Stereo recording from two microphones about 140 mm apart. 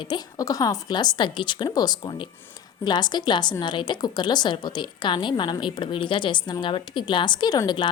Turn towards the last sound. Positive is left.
turn(degrees=30)  # may be behind; listen again after turning